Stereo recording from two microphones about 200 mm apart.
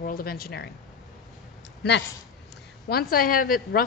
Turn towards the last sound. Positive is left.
turn(degrees=45)  # may be behind; listen again after turning